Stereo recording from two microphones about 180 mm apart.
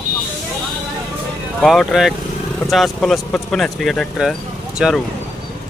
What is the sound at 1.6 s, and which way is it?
Speech, centre (ahead or behind).